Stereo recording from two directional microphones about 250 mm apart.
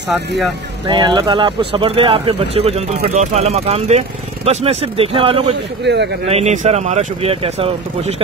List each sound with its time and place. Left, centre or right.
0.8 s speech: centre
5.9 s speech: right
6.2 s speech: right